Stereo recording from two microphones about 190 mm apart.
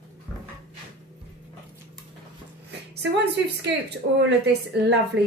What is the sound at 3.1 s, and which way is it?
A woman's voice, 65° right (ahead or behind).